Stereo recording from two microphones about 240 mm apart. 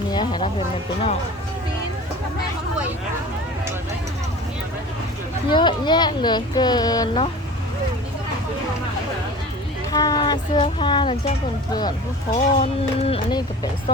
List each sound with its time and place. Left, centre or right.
0.1 s a sound: centre
5.5 s speech: centre
9.9 s speech: centre
12.3 s speech: left